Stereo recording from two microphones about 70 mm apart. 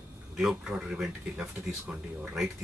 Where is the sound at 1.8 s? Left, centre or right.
Centre.